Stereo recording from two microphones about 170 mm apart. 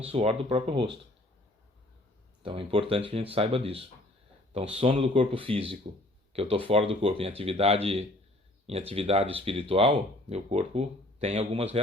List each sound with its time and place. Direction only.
0.0 s speech: 35° right (ahead or behind)
2.4 s speech: 30° right (ahead or behind)